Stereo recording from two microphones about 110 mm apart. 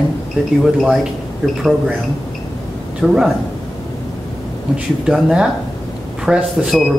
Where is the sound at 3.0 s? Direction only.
5° right (ahead or behind).